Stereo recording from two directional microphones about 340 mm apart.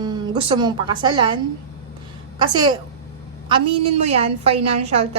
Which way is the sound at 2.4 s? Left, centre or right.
Centre.